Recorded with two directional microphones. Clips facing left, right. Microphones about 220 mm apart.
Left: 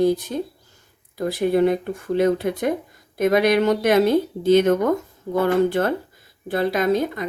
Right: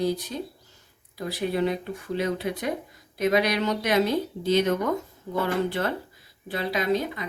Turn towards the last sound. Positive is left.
turn(degrees=50)  # may be behind; listen again after turning